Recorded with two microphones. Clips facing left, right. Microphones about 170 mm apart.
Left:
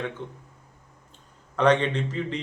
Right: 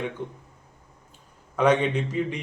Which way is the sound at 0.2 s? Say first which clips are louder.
Right 3 dB; 15° right (ahead or behind).